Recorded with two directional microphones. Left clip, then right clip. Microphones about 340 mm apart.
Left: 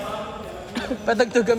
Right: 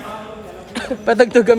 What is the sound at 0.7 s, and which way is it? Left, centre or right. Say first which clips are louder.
Speech: right 7 dB; right.